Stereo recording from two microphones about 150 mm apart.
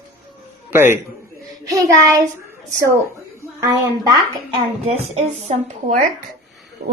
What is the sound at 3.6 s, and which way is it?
Speech, 25° right (ahead or behind).